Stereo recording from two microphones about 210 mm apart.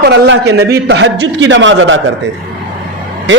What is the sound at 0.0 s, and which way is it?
A man's voice, 55° right (ahead or behind).